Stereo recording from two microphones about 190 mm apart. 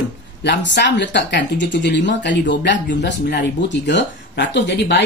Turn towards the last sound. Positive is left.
turn(degrees=65)  # may be behind; listen again after turning